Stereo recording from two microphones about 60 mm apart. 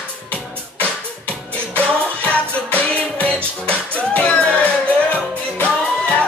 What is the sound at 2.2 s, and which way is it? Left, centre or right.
Music, left.